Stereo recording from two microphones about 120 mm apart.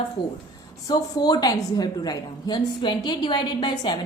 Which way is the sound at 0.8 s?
30° left (ahead or behind).